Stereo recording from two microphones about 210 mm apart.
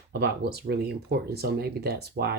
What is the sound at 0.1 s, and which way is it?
Speech, 50° right (ahead or behind).